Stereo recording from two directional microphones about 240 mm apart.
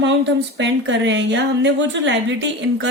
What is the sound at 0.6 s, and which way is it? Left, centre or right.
Speech, right.